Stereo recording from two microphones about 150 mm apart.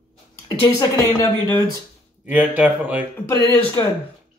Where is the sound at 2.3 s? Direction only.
10° right (ahead or behind).